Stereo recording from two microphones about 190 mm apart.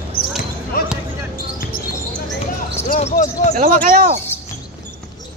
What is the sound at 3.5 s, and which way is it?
Speech, 50° right (ahead or behind).